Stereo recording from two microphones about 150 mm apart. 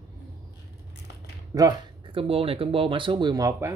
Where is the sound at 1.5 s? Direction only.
25° right (ahead or behind).